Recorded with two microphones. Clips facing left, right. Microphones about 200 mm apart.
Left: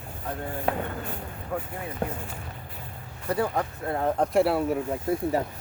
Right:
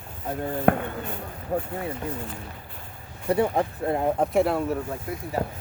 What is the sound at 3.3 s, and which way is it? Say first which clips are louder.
Speech: right 4 dB; 25° right (ahead or behind).